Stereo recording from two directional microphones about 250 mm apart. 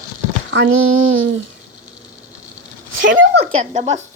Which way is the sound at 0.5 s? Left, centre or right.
Right.